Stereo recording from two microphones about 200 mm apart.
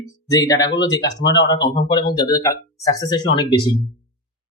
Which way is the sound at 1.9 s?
20° left (ahead or behind).